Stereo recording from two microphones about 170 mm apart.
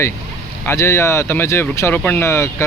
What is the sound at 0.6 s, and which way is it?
Speech, 15° left (ahead or behind).